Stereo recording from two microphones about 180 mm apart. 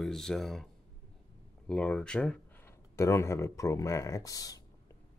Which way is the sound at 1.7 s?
5° left (ahead or behind).